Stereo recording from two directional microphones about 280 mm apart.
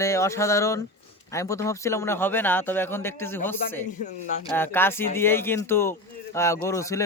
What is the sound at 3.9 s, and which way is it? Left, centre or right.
Speech, left.